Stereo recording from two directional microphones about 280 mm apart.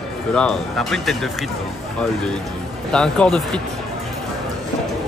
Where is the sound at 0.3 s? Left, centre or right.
Centre.